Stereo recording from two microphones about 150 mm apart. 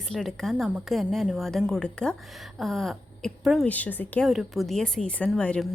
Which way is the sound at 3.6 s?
10° left (ahead or behind).